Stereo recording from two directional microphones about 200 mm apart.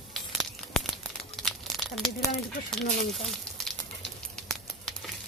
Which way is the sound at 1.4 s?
Centre (ahead or behind).